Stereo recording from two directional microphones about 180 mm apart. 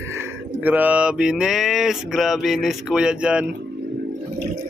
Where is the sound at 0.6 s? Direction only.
10° right (ahead or behind).